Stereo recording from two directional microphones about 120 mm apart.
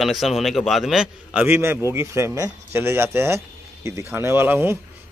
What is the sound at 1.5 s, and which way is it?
Speech, 20° right (ahead or behind).